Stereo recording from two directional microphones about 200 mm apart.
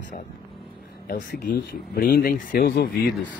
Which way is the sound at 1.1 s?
45° left (ahead or behind).